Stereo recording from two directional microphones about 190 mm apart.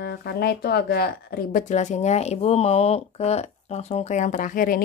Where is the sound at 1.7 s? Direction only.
40° left (ahead or behind).